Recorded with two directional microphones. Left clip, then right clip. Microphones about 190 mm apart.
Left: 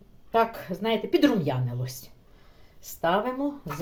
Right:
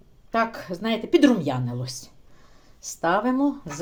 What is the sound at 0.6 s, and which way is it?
Speech, 30° right (ahead or behind).